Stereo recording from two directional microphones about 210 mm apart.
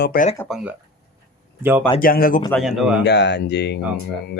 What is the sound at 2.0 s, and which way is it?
Speech, 45° left (ahead or behind).